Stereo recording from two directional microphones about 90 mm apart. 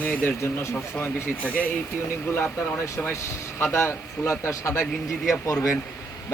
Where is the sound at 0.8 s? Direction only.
15° left (ahead or behind).